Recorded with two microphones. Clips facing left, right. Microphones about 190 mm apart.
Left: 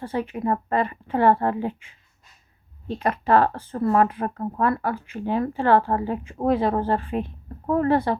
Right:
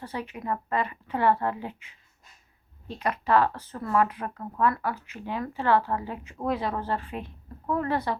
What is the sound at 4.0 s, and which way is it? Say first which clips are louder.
Speech: left 5 dB; 50° left (ahead or behind).